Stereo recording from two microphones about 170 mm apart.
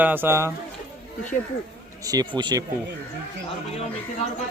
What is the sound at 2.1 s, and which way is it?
Speech, 25° right (ahead or behind).